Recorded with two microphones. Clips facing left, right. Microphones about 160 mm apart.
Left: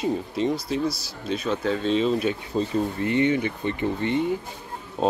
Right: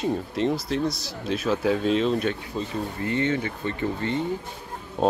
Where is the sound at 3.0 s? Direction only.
15° left (ahead or behind).